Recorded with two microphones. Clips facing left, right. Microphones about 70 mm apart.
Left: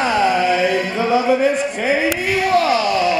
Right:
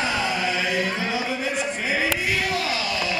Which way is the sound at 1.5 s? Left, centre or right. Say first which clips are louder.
Left 6 dB; left.